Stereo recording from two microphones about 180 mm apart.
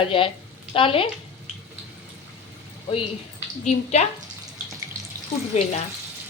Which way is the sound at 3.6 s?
40° left (ahead or behind).